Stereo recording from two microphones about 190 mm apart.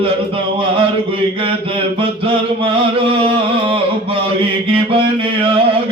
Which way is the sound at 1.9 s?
25° right (ahead or behind).